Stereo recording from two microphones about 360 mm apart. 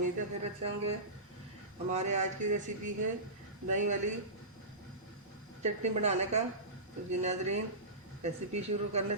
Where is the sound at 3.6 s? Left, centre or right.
Centre.